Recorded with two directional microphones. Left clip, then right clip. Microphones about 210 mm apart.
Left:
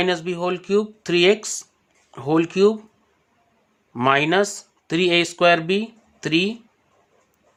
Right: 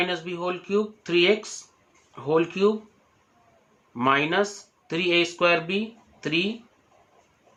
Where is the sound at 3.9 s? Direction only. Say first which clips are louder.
Left 4 dB; 55° left (ahead or behind).